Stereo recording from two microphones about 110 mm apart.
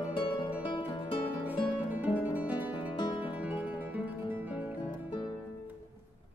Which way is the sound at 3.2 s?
15° right (ahead or behind).